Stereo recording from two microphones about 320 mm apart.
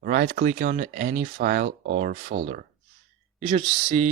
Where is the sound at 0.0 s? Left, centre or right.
Right.